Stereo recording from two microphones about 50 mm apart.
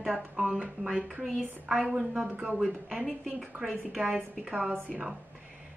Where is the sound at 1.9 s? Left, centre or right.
Centre.